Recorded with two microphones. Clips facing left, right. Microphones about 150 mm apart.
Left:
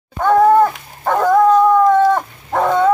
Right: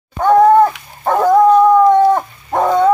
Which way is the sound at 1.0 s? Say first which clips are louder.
Right 2 dB; 15° right (ahead or behind).